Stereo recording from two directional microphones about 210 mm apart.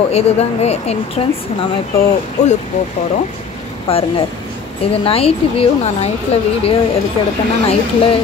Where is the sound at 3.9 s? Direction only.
30° left (ahead or behind).